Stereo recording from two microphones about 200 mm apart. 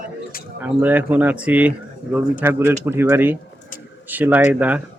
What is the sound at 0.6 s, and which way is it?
Speech, 10° right (ahead or behind).